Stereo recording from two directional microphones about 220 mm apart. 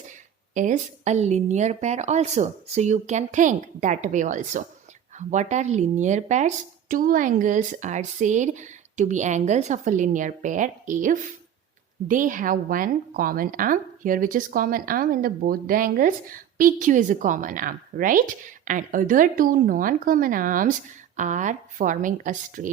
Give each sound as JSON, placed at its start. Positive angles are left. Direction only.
{"t": 0.5, "sound": "a woman's voice", "side_deg": -35}